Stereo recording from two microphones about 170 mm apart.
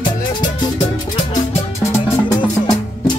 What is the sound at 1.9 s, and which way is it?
Music, 15° left (ahead or behind).